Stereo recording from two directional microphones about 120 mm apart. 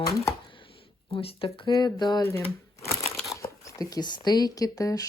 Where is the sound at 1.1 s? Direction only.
50° left (ahead or behind).